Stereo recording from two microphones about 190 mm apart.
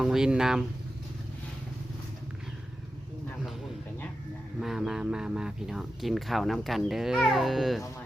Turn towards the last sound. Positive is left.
turn(degrees=0)  # may be behind; listen again after turning